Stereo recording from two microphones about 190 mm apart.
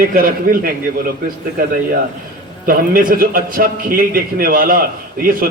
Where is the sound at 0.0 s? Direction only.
50° right (ahead or behind).